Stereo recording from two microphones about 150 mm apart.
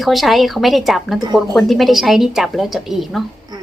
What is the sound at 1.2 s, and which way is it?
Speech, 25° right (ahead or behind).